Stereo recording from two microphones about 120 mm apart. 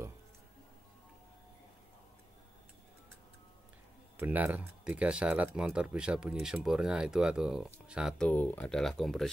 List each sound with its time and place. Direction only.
4.2 s speech: 15° right (ahead or behind)
8.2 s speech: 15° left (ahead or behind)